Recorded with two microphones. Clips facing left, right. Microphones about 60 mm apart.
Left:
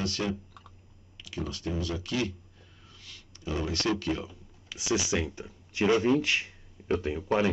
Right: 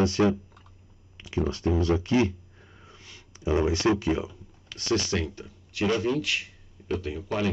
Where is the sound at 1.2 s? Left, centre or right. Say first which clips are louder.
Right 8 dB; right.